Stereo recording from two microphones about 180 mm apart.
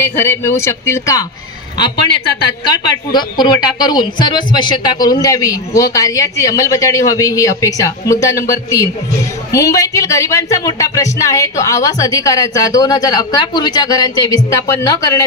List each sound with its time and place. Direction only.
0.0 s speech: 15° left (ahead or behind)
3.1 s speech: 25° left (ahead or behind)